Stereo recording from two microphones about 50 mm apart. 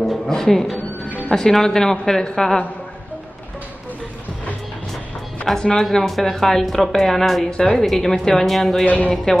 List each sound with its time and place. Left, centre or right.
0.3 s speech: centre
5.6 s speech: centre
5.9 s speech: centre
8.8 s speech: left
9.1 s speech: centre